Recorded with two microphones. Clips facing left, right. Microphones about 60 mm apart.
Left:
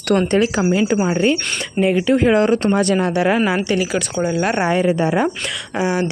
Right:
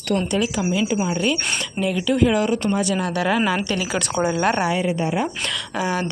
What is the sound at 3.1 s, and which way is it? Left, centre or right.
Speech, left.